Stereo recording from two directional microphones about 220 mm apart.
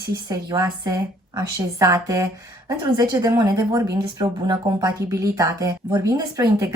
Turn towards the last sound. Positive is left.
turn(degrees=-15)  # may be behind; listen again after turning